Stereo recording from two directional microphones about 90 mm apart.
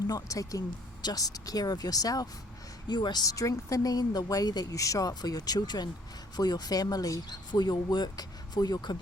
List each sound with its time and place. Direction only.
0.1 s speech: 40° left (ahead or behind)